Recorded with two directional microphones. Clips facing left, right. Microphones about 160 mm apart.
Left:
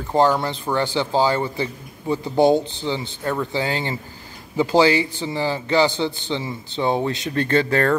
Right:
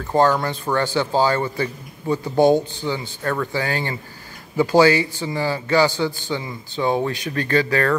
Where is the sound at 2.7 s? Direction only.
20° left (ahead or behind).